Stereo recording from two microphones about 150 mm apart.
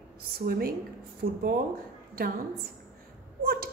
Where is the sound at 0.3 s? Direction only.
80° right.